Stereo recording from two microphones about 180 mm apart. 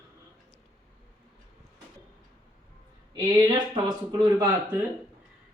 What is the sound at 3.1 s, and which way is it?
Speech, 25° right (ahead or behind).